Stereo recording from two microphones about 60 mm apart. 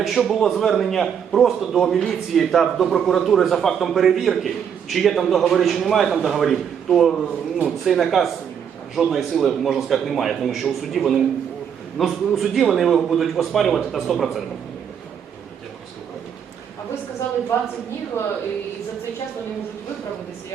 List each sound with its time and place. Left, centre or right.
0.0 s speech: centre
18.2 s speech: left